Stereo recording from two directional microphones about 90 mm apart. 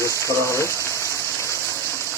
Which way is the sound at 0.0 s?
35° left (ahead or behind).